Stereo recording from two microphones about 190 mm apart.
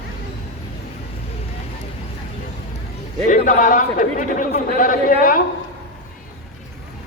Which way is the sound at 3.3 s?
45° left (ahead or behind).